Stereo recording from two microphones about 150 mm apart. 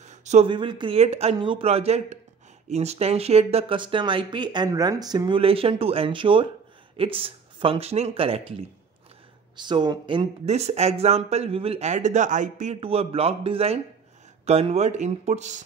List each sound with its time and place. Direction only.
0.0 s a sound: 50° right (ahead or behind)
0.5 s speech: 30° right (ahead or behind)
0.9 s speech: 45° right (ahead or behind)
10.4 s speech: 45° right (ahead or behind)
12.8 s speech: 40° right (ahead or behind)